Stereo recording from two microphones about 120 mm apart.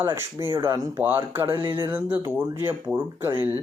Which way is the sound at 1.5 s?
40° right (ahead or behind).